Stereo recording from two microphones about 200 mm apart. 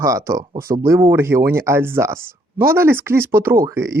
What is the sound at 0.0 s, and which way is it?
Speech, 15° right (ahead or behind).